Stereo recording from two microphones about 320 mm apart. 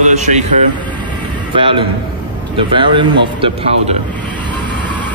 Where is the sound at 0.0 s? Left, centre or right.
Right.